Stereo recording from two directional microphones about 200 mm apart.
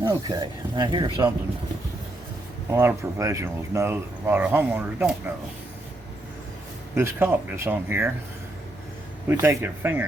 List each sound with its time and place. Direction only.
0.0 s speech: 20° right (ahead or behind)
2.6 s speech: 15° right (ahead or behind)
6.9 s speech: 10° right (ahead or behind)
9.3 s speech: 15° right (ahead or behind)